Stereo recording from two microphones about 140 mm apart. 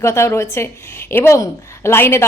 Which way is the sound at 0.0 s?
20° left (ahead or behind).